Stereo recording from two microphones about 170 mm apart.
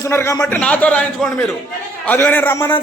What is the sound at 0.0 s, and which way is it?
A man's voice, 15° left (ahead or behind).